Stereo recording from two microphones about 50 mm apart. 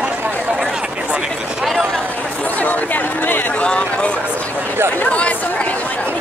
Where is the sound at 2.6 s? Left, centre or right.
Left.